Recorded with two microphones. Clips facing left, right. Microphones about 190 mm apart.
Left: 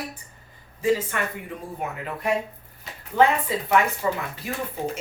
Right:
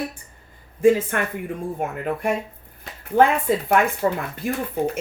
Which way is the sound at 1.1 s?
60° right (ahead or behind).